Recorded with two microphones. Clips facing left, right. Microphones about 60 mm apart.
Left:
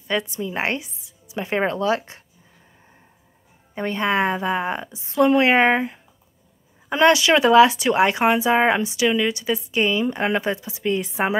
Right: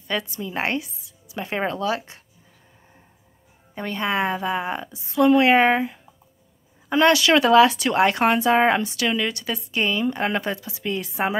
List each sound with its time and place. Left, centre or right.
0.1 s a woman's voice: left
1.7 s a woman's voice: left
3.8 s a woman's voice: left
4.6 s a woman's voice: centre
6.9 s speech: left